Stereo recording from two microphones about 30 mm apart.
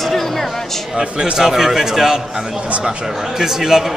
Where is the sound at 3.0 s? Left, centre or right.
Centre.